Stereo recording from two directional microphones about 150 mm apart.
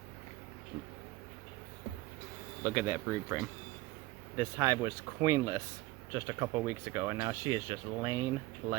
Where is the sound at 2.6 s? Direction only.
10° right (ahead or behind).